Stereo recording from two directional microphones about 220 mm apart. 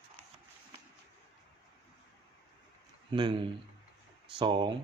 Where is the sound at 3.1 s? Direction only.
20° right (ahead or behind).